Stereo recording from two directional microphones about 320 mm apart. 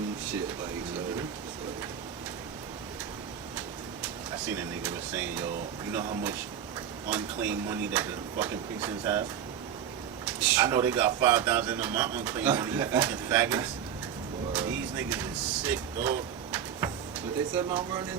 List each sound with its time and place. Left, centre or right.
4.4 s speech: centre
10.2 s speech: centre
14.5 s a sound: centre
15.6 s vehicle: centre
17.7 s speech: centre